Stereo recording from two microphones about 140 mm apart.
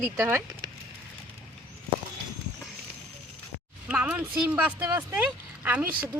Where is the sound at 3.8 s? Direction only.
10° right (ahead or behind).